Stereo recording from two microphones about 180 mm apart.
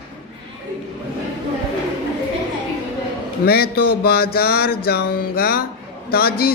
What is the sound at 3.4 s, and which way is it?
Mantra, 60° left (ahead or behind).